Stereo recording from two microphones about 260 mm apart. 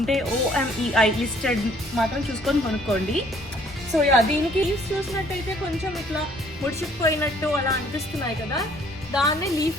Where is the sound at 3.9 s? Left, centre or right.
Centre.